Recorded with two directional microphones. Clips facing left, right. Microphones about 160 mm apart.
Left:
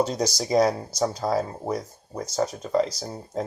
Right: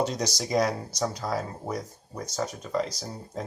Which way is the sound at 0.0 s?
35° left (ahead or behind).